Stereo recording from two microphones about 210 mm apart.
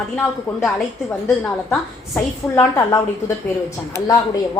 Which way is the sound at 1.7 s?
10° left (ahead or behind).